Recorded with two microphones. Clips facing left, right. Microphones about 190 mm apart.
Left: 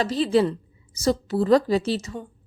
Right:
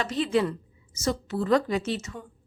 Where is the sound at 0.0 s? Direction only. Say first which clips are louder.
Left 5 dB; 35° left (ahead or behind).